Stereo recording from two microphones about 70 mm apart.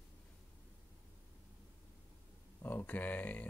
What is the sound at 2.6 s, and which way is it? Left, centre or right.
Speech, left.